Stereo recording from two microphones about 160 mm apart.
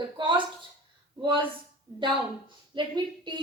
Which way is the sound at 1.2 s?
30° right (ahead or behind).